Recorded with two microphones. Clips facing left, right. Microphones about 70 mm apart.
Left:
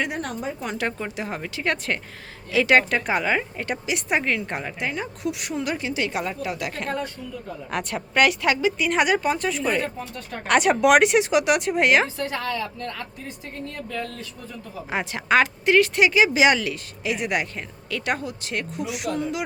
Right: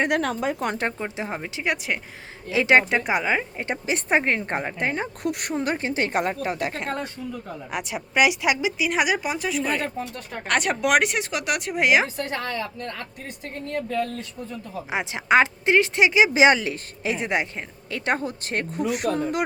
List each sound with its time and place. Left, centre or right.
0.1 s a woman's voice: right
0.9 s a woman's voice: right
2.5 s a woman's voice: right
3.7 s a woman's voice: right
5.5 s a woman's voice: right
7.7 s a woman's voice: centre
12.0 s a woman's voice: right
14.8 s a woman's voice: centre; by 19.4 s right